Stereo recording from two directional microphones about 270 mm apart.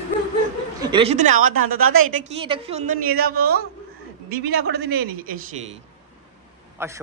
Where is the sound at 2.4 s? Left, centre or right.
Centre; by 5.3 s right.